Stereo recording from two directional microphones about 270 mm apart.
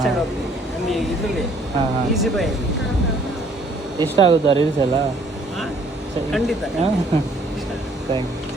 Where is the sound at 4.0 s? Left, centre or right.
Right.